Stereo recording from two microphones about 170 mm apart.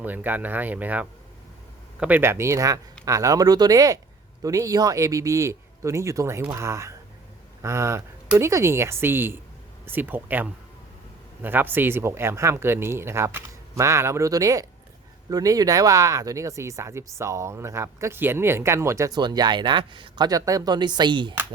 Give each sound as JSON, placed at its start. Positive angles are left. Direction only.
{"t": 0.0, "sound": "speech", "side_deg": -10}